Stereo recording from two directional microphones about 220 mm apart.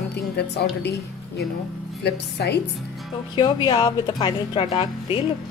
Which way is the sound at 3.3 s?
20° left (ahead or behind).